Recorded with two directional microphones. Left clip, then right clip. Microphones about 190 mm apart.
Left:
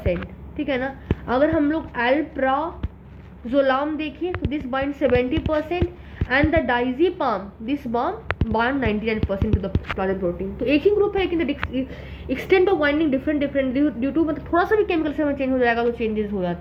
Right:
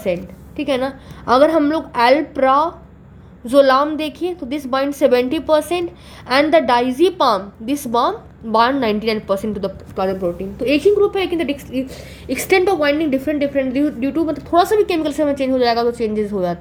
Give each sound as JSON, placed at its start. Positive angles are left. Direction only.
{"t": 0.0, "sound": "a woman's voice", "side_deg": -40}